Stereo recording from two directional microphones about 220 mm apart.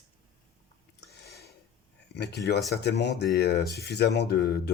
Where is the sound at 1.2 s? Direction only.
45° left (ahead or behind).